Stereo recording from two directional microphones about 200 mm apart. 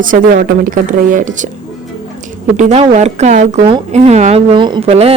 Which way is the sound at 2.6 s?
35° right (ahead or behind).